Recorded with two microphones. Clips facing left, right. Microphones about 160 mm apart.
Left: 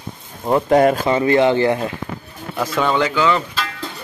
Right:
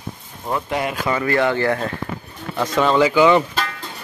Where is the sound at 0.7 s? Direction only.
45° left (ahead or behind).